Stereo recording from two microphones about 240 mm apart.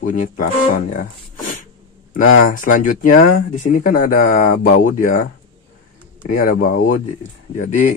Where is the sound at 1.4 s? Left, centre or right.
Left.